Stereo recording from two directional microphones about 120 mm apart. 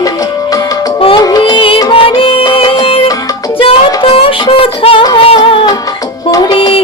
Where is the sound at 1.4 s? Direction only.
45° left (ahead or behind).